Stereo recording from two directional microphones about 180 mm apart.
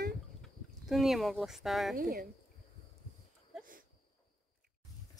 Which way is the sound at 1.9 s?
55° right (ahead or behind).